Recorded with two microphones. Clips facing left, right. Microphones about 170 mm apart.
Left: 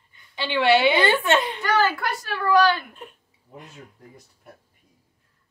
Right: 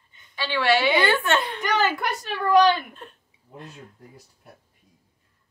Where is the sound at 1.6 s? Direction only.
20° right (ahead or behind).